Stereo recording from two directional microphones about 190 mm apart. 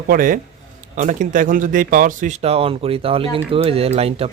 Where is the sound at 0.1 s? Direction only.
45° right (ahead or behind).